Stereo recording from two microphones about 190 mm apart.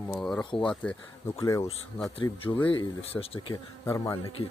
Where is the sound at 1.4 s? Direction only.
15° left (ahead or behind).